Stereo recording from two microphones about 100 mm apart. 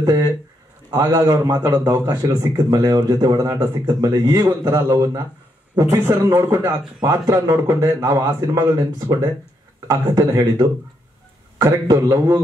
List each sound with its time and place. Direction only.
0.0 s speech: 35° right (ahead or behind)